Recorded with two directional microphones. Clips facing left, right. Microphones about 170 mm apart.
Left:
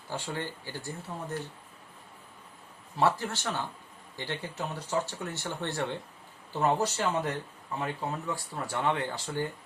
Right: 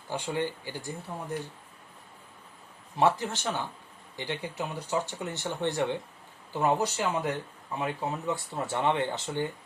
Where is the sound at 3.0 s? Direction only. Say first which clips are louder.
Right 2 dB; 20° right (ahead or behind).